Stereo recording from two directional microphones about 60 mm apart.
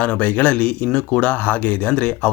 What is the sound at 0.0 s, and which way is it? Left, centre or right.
Speech, left.